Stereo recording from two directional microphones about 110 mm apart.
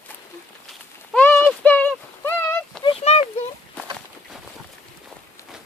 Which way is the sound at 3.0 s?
75° left (ahead or behind).